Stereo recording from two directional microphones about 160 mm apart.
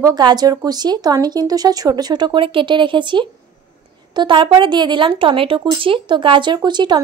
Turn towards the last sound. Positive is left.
turn(degrees=-30)  # may be behind; listen again after turning